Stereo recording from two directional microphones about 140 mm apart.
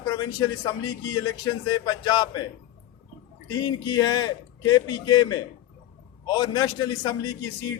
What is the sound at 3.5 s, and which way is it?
A man's voice, 30° left (ahead or behind).